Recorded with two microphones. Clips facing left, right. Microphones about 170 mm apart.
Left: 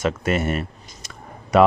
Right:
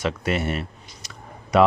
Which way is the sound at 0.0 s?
45° left (ahead or behind).